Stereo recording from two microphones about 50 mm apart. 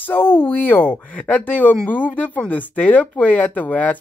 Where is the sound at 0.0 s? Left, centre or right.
Left.